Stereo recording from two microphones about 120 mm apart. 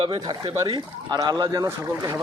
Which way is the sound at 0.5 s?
35° right (ahead or behind).